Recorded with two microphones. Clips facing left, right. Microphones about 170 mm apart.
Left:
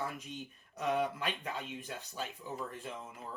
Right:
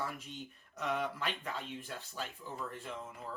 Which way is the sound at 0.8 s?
20° left (ahead or behind).